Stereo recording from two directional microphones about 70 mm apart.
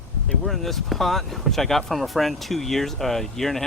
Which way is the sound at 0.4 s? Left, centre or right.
Centre.